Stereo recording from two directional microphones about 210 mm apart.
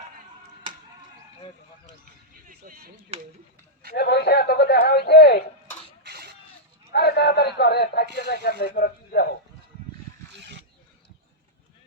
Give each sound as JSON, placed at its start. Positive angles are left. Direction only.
{"t": 2.5, "sound": "speech", "side_deg": -45}
{"t": 3.9, "sound": "a man's voice", "side_deg": 50}
{"t": 6.0, "sound": "a sound", "side_deg": -50}
{"t": 6.9, "sound": "a man's voice", "side_deg": 50}
{"t": 10.4, "sound": "wild animals", "side_deg": -55}